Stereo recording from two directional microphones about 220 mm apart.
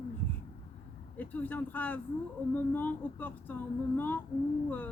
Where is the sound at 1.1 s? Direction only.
10° left (ahead or behind).